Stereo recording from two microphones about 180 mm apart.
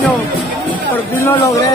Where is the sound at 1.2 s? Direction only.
15° left (ahead or behind).